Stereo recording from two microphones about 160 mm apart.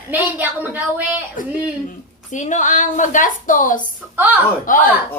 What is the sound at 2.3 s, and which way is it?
A woman's voice, 50° left (ahead or behind).